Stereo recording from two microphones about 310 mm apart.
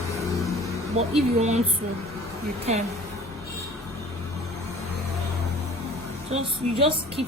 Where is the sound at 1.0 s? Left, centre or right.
Right.